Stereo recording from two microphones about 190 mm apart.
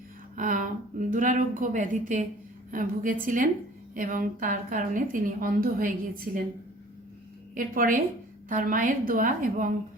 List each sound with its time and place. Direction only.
0.3 s a woman's voice: 45° right (ahead or behind)
7.5 s a woman's voice: 45° right (ahead or behind)